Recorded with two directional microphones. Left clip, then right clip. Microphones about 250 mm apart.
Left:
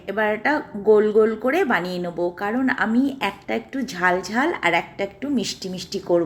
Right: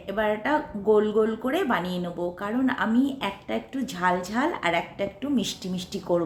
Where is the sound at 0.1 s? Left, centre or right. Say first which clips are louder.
Left 4 dB; centre.